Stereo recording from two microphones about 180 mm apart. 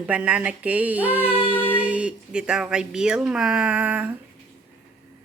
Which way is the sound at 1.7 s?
5° right (ahead or behind).